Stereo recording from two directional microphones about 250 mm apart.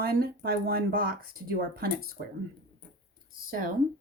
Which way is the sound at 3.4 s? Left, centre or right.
Right.